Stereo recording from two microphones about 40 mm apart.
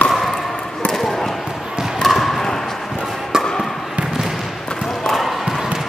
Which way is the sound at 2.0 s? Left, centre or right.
Centre.